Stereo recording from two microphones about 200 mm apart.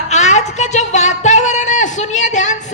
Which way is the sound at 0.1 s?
35° left (ahead or behind).